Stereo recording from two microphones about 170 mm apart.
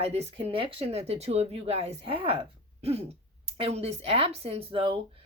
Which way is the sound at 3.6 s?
35° right (ahead or behind).